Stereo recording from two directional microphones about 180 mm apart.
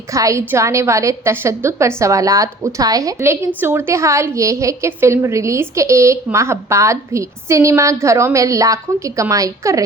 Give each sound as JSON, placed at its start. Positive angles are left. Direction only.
{"t": 0.1, "sound": "a woman's voice", "side_deg": -15}